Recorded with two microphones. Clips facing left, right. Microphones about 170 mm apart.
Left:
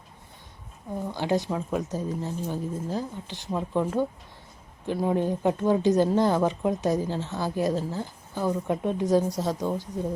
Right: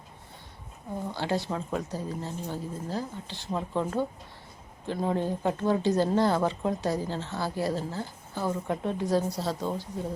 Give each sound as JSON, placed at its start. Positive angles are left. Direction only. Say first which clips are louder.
{"t": 1.1, "sound": "speech", "louder": "left 4 dB", "side_deg": 15}
{"t": 4.9, "sound": "speech", "louder": "left 3 dB", "side_deg": 15}